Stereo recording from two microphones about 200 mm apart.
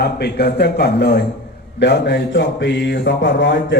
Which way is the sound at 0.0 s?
55° left (ahead or behind).